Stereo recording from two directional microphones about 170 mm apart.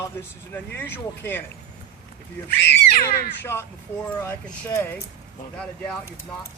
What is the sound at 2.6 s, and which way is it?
Speech, 70° left (ahead or behind).